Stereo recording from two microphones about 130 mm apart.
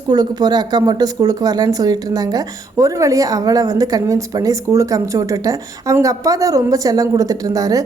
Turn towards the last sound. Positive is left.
turn(degrees=-25)  # may be behind; listen again after turning